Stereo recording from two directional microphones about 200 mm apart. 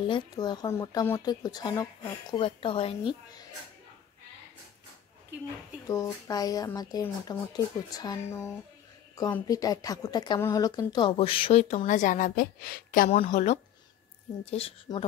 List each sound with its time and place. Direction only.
0.0 s speech: 25° left (ahead or behind)
5.9 s a woman's voice: 15° left (ahead or behind)
14.9 s speech: 20° left (ahead or behind)